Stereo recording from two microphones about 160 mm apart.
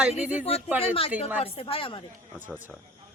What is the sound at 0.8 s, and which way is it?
Speech, 35° left (ahead or behind).